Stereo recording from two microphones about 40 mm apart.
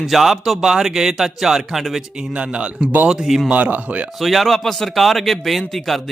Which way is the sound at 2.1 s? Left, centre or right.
Right.